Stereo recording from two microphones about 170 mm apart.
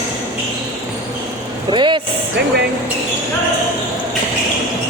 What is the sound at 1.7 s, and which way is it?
Vehicle, 30° right (ahead or behind).